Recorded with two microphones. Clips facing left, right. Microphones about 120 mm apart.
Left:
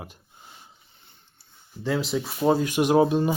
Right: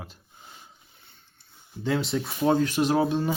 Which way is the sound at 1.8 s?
Centre (ahead or behind).